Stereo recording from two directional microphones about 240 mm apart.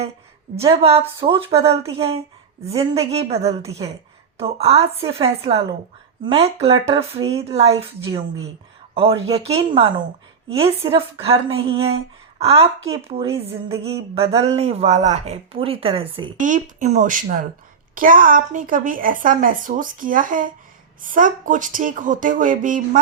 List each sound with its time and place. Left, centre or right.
1.2 s a woman's voice: right